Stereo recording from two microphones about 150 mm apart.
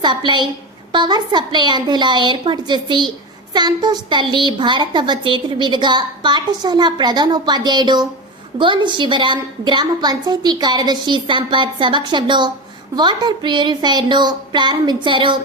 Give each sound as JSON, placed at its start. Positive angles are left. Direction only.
{"t": 0.0, "sound": "a woman's voice", "side_deg": -30}